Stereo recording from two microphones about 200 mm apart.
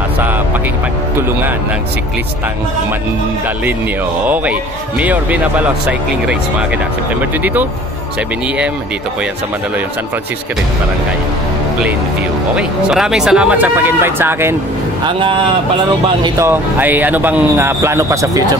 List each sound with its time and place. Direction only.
4.3 s speech: 5° right (ahead or behind)
7.2 s speech: 10° right (ahead or behind)
12.5 s speech: 5° right (ahead or behind)
15.0 s speech: 25° right (ahead or behind)
16.3 s speech: 10° right (ahead or behind)